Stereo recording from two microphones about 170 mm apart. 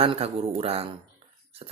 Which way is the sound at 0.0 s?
35° right (ahead or behind).